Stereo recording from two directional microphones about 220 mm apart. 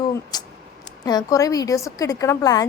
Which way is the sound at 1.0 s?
15° left (ahead or behind).